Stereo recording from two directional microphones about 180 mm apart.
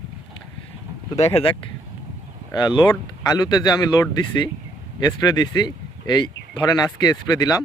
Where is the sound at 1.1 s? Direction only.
35° left (ahead or behind).